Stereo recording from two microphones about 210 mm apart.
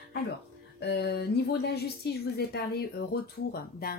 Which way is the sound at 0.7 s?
50° left (ahead or behind).